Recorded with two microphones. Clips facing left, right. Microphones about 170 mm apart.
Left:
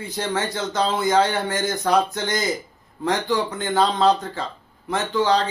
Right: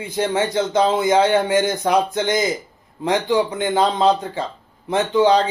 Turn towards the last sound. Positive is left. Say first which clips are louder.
# right 5 dB
turn(degrees=-20)  # may be behind; listen again after turning